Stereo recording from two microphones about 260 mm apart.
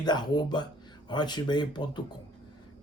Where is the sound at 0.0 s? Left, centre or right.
Centre.